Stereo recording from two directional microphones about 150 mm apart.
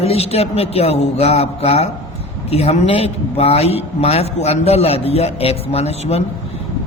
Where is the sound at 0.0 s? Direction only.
45° left (ahead or behind).